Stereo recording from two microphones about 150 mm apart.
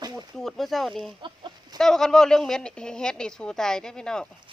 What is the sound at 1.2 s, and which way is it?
Chicken, 30° right (ahead or behind).